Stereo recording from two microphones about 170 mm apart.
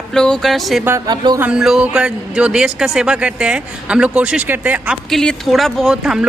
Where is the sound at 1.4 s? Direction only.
5° right (ahead or behind).